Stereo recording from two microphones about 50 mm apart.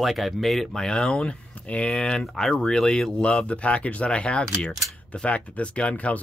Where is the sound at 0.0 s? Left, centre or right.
Centre.